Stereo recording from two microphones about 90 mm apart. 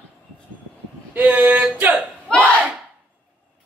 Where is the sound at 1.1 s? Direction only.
20° right (ahead or behind).